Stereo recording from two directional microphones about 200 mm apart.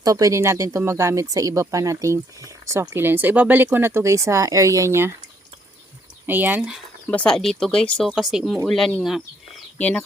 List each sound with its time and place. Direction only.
0.0 s speech: 15° right (ahead or behind)
6.2 s speech: 10° right (ahead or behind); by 10.0 s 5° left (ahead or behind)